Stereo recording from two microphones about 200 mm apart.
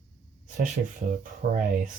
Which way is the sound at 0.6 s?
40° right (ahead or behind).